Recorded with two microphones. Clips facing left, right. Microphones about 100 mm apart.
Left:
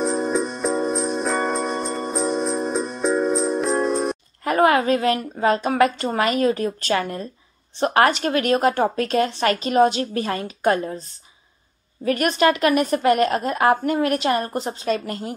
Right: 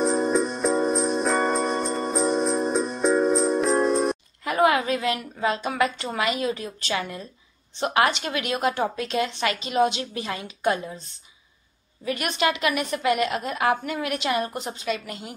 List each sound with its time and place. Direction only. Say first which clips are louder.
0.0 s music: even; centre (ahead or behind)
4.5 s a woman's voice: left 4 dB; 40° left (ahead or behind)
12.0 s a woman's voice: left 6 dB; 45° left (ahead or behind)